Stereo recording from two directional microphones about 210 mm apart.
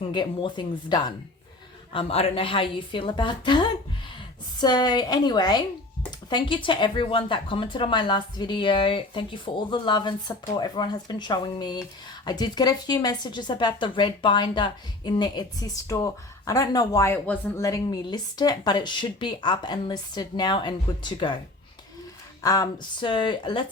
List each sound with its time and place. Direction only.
0.1 s speech: 20° left (ahead or behind)
22.4 s speech: 15° left (ahead or behind)